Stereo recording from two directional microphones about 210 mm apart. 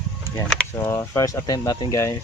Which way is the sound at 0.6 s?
10° left (ahead or behind).